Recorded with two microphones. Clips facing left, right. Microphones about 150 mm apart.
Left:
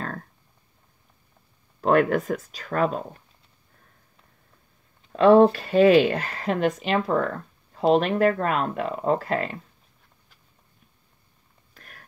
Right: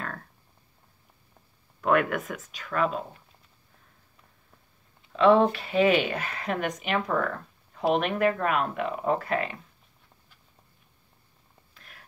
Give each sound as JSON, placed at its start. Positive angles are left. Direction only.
{"t": 0.0, "sound": "a sound", "side_deg": 40}
{"t": 1.8, "sound": "speech", "side_deg": 35}
{"t": 5.1, "sound": "speech", "side_deg": 45}
{"t": 11.7, "sound": "whispering", "side_deg": 45}